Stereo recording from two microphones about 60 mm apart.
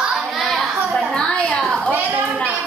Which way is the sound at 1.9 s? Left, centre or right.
Right.